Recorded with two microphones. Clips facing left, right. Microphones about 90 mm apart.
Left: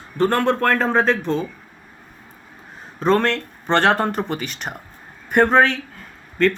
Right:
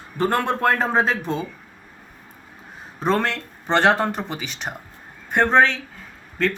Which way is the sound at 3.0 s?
5° right (ahead or behind).